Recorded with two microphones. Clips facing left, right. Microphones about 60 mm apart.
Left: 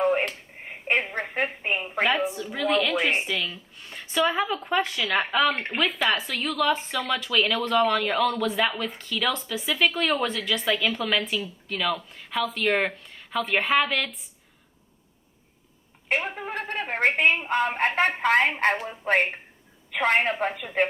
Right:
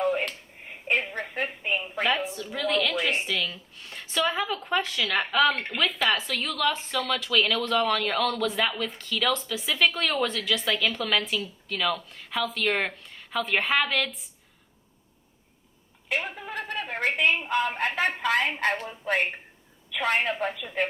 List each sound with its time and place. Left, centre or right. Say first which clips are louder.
0.0 s a sound: left 3 dB; left
2.0 s a woman's voice: left 2 dB; centre
2.9 s a woman's voice: left 3 dB; left
3.2 s speech: even; centre
4.8 s a woman's voice: left 2 dB; left; by 14.1 s centre
16.0 s a woman's voice: left 3 dB; left
18.9 s speech: left 3 dB; left